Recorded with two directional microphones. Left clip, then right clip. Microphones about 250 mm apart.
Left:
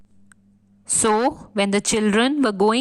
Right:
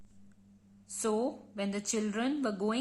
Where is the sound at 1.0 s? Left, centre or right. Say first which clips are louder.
Left 13 dB; left.